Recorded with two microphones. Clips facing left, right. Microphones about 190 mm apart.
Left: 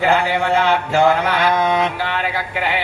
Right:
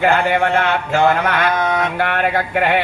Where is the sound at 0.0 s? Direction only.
55° right (ahead or behind).